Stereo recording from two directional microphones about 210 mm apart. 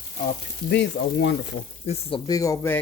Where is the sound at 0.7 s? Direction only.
55° left (ahead or behind).